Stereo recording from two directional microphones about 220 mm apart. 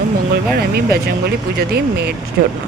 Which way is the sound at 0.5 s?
45° right (ahead or behind).